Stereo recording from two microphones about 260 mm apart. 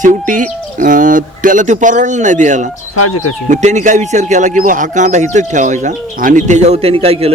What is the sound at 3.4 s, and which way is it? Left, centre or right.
Speech, right.